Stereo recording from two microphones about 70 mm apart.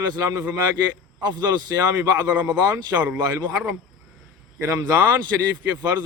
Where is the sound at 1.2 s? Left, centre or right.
Right.